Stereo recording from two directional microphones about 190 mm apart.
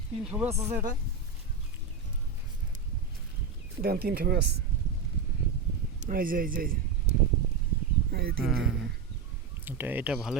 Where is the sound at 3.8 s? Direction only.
55° right (ahead or behind).